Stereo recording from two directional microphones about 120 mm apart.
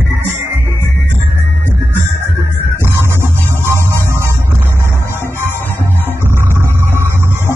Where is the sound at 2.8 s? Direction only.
20° right (ahead or behind).